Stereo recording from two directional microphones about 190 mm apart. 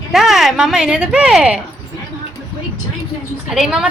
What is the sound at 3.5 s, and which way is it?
Speech, 5° right (ahead or behind).